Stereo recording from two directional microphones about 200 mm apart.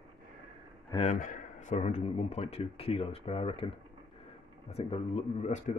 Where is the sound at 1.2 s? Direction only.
40° left (ahead or behind).